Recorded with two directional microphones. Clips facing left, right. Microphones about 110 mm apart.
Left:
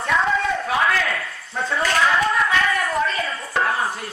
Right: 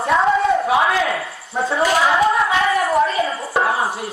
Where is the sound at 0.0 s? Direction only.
30° right (ahead or behind).